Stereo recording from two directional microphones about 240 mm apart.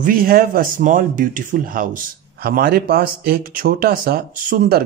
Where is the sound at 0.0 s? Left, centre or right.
Right.